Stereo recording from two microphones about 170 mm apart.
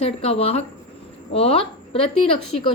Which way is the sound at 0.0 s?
35° left (ahead or behind).